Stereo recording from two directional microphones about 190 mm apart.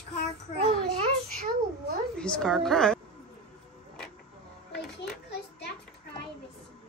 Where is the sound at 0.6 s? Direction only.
30° right (ahead or behind).